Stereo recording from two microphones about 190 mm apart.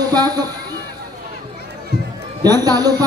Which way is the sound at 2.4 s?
20° right (ahead or behind).